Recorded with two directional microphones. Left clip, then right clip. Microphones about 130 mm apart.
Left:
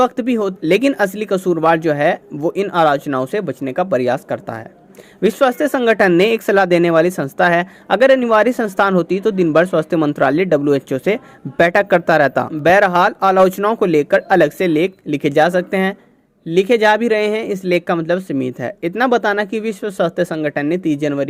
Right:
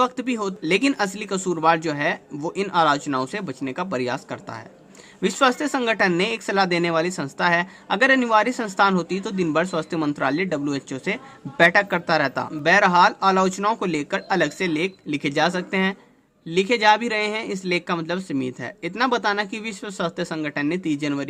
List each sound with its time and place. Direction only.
0.0 s speech: 45° left (ahead or behind)